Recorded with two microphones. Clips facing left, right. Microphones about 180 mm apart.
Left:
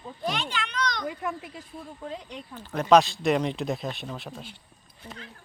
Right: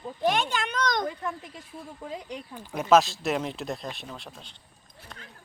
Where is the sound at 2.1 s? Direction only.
10° right (ahead or behind).